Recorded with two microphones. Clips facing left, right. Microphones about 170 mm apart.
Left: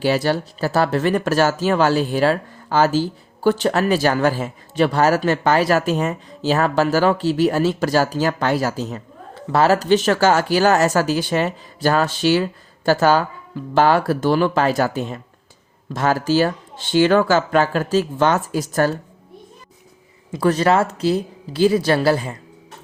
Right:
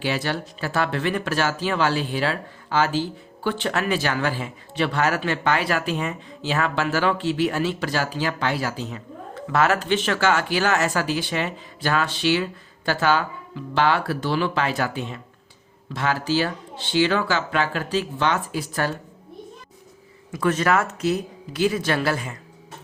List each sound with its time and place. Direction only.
0.0 s speech: 40° left (ahead or behind)
20.3 s speech: 35° left (ahead or behind)